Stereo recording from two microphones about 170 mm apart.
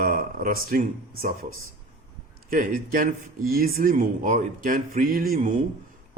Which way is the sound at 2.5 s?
55° right (ahead or behind).